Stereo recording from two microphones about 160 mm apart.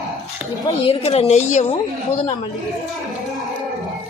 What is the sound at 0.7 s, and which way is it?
A woman's voice, 40° left (ahead or behind).